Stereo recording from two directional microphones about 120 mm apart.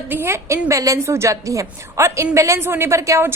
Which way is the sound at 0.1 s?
20° right (ahead or behind).